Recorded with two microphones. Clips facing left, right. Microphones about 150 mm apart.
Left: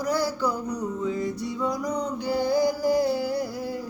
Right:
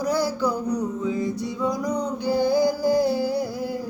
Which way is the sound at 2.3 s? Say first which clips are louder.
Right 3 dB; 25° right (ahead or behind).